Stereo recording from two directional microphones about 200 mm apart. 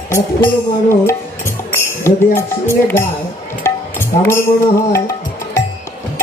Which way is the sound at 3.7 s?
10° left (ahead or behind).